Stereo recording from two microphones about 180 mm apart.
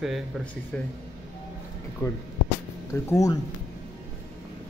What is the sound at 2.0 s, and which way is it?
Speech, 20° left (ahead or behind).